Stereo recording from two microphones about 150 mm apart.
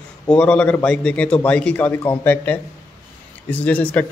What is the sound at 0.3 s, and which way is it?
A man's voice, 10° left (ahead or behind).